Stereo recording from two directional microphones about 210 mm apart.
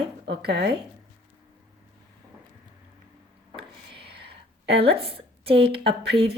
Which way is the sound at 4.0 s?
50° right (ahead or behind).